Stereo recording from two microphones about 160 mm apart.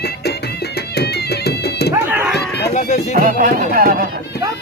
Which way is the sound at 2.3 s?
90° left.